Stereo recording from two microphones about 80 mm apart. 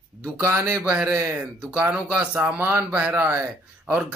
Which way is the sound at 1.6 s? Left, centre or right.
Centre.